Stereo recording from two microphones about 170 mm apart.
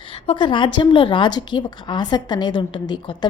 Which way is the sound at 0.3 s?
30° left (ahead or behind).